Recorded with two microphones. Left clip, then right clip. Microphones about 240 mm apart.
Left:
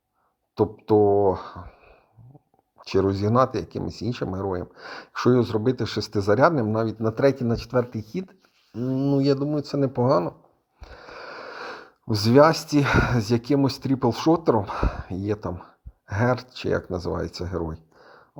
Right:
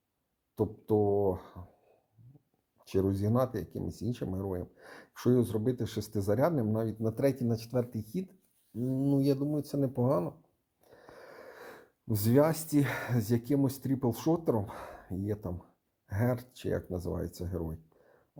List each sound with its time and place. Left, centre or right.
0.5 s speech: centre
2.8 s speech: centre